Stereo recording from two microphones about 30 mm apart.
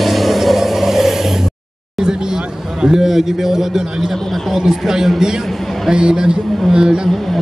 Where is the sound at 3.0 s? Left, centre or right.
Centre.